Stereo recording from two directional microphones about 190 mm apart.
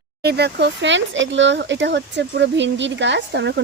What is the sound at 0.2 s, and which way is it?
Speech, 60° right (ahead or behind).